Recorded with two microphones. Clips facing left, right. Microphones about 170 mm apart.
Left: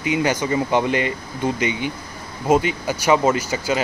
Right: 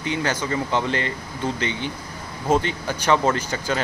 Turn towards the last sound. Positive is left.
turn(degrees=10)  # may be behind; listen again after turning